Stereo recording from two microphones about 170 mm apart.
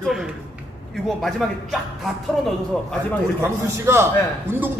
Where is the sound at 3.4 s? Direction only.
15° right (ahead or behind).